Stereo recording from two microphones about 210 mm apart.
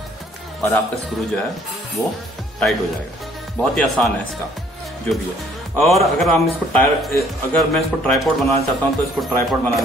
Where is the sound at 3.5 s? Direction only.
Centre (ahead or behind).